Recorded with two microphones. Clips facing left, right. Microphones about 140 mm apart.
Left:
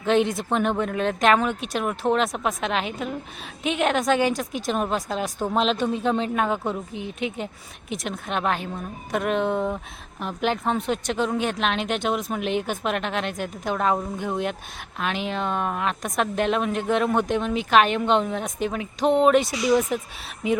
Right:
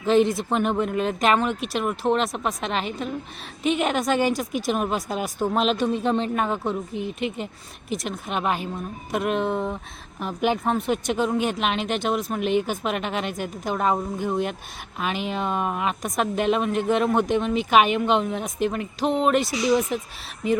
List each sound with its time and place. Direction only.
0.0 s speech: centre (ahead or behind)